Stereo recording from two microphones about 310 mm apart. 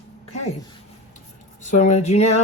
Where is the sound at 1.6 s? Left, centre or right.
Left.